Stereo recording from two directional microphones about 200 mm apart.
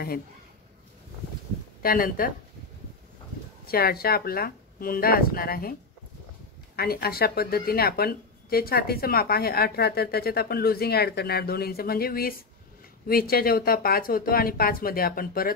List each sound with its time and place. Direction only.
1.8 s speech: 45° left (ahead or behind)
3.6 s speech: 50° left (ahead or behind)
6.8 s speech: 50° left (ahead or behind)